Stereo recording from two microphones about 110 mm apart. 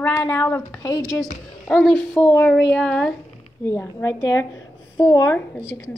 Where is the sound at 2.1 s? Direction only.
25° left (ahead or behind).